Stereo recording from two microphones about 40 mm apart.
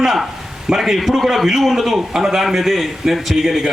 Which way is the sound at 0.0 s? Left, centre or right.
Centre.